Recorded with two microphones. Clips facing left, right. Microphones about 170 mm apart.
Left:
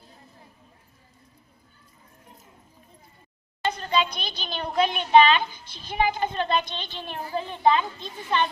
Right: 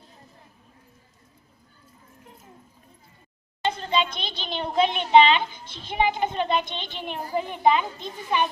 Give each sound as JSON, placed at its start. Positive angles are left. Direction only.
{"t": 3.6, "sound": "a child's voice", "side_deg": -25}